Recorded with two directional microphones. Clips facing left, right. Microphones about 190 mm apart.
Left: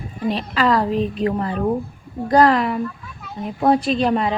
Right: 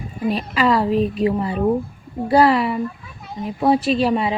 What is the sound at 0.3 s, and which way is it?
A woman's voice, 10° right (ahead or behind).